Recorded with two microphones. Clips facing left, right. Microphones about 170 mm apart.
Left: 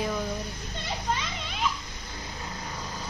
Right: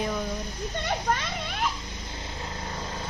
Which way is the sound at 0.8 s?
55° right (ahead or behind).